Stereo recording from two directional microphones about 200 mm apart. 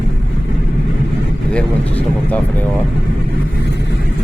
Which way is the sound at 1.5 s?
5° left (ahead or behind).